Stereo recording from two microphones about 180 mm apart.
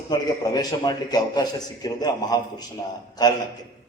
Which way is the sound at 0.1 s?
20° left (ahead or behind).